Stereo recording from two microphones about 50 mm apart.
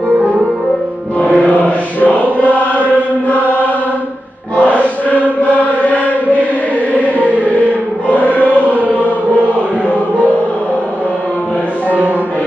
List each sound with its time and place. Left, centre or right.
1.2 s mantra: left
2.4 s chant: left
5.1 s chant: left
8.3 s choir: left
10.1 s music: right